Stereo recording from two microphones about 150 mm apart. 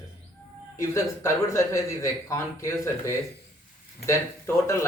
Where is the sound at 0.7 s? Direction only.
20° left (ahead or behind).